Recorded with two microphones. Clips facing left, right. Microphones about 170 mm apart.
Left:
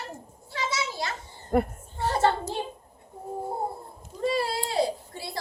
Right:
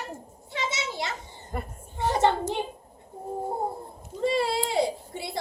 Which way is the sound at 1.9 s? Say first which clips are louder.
Right 1 dB; 20° right (ahead or behind).